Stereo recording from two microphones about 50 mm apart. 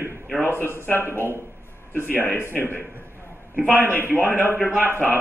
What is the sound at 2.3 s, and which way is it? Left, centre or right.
Speech, left.